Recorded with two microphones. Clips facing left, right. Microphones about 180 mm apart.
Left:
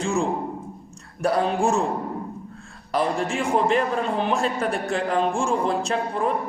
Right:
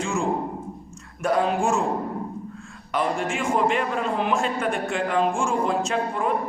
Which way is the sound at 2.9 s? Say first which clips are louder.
Left 2 dB; 35° left (ahead or behind).